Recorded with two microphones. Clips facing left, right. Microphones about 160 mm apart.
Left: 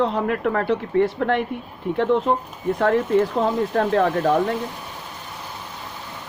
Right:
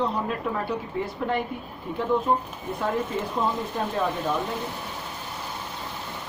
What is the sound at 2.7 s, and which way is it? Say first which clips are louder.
Speech: left 9 dB; 75° left (ahead or behind).